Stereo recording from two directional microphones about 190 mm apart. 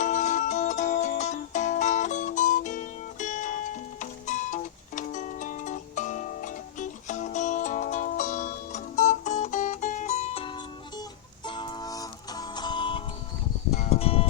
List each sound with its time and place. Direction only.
0.0 s music: 40° left (ahead or behind)